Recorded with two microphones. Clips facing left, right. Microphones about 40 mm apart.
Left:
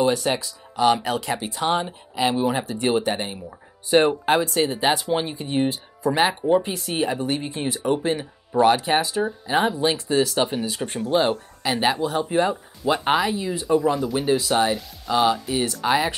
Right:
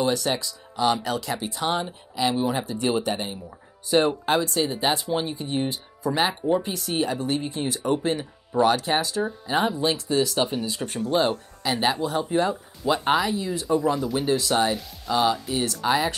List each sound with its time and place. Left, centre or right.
0.1 s speech: left
4.5 s speech: left
4.8 s speech: left
7.8 s speech: centre
9.2 s speech: centre